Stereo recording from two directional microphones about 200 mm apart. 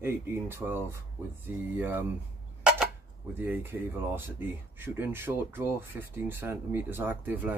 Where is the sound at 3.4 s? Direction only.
10° right (ahead or behind).